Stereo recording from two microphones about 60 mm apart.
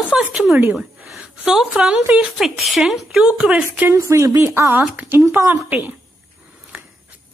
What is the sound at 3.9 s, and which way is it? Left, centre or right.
Speech, right.